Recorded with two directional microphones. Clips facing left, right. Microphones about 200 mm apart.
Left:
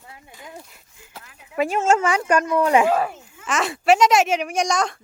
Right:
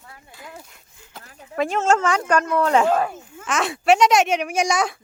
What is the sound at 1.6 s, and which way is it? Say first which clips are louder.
A child's voice: left 1 dB; 10° left (ahead or behind).